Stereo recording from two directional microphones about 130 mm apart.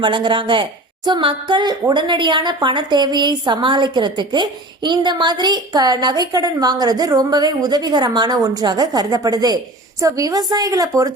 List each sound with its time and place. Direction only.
0.0 s a woman's voice: 40° right (ahead or behind)